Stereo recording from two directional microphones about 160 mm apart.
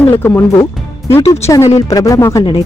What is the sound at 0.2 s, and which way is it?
Speech, 15° left (ahead or behind).